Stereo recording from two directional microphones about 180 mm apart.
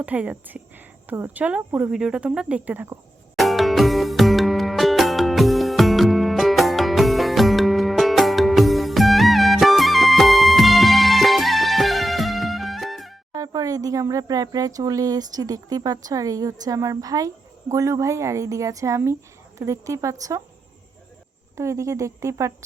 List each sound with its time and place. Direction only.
0.0 s speech: 10° right (ahead or behind)
3.3 s music: centre (ahead or behind)
13.3 s speech: 20° right (ahead or behind)
21.5 s speech: 15° right (ahead or behind)